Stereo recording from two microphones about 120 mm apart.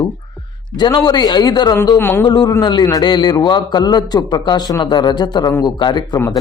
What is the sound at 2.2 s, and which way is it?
A man's voice, 35° left (ahead or behind).